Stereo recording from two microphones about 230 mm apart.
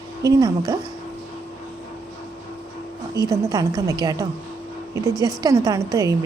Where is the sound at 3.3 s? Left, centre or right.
Centre.